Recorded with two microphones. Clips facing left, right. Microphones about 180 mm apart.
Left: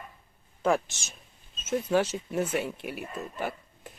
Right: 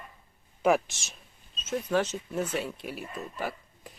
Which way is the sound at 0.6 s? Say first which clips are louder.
Right 2 dB; 5° right (ahead or behind).